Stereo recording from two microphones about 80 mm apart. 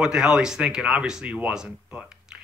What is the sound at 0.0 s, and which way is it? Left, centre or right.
Speech, centre.